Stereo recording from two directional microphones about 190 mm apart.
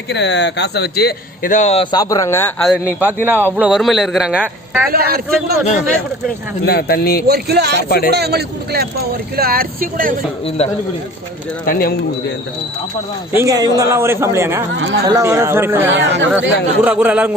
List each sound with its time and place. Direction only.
0.1 s speech: 65° left (ahead or behind); by 2.5 s 15° left (ahead or behind)
2.6 s speech: centre (ahead or behind)
4.9 s speech: 55° right (ahead or behind)
6.7 s speech: 55° left (ahead or behind)
7.3 s speech: 55° right (ahead or behind)
7.9 s speech: 55° left (ahead or behind)
8.1 s speech: 60° right (ahead or behind)
10.6 s a man's voice: 35° left (ahead or behind)
11.6 s speech: 50° left (ahead or behind)
13.3 s speech: 15° right (ahead or behind)
14.8 s a woman's voice: 80° right
15.0 s speech: 15° right (ahead or behind)
15.9 s speech: 70° right (ahead or behind)
16.8 s speech: 5° right (ahead or behind)